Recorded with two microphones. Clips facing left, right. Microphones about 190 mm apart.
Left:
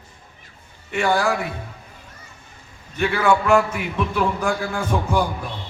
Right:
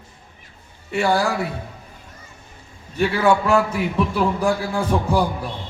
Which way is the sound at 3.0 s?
35° right (ahead or behind).